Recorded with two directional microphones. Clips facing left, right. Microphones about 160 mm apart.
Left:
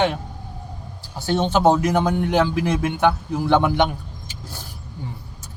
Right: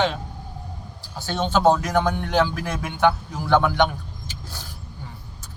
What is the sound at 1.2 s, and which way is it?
A man's voice, 15° left (ahead or behind).